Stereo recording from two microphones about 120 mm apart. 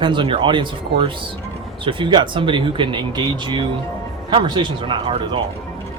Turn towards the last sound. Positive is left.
turn(degrees=-45)  # may be behind; listen again after turning